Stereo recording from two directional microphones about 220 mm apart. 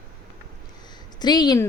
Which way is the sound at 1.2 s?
20° left (ahead or behind).